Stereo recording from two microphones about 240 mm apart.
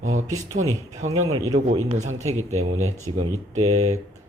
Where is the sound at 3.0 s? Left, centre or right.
Right.